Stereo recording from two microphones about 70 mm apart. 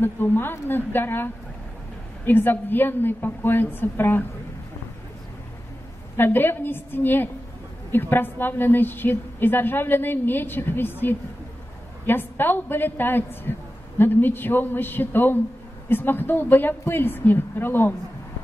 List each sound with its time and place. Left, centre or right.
0.0 s a man's voice: left
6.1 s a woman's voice: left